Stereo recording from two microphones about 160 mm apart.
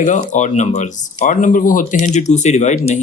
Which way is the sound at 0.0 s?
50° left (ahead or behind).